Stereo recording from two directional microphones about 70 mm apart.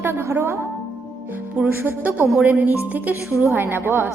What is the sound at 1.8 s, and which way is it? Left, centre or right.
A woman's voice, right.